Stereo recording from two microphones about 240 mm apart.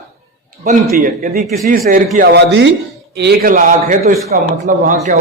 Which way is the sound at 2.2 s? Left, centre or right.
Right.